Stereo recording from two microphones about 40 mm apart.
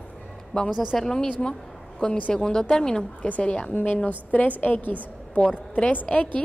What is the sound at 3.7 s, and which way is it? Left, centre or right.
A woman's voice, left.